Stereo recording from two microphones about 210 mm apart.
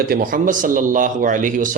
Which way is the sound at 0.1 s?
40° right (ahead or behind).